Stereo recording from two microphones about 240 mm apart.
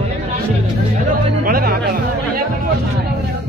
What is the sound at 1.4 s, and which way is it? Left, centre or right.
Music, right.